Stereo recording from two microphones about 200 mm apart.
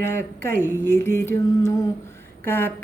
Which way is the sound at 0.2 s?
10° left (ahead or behind).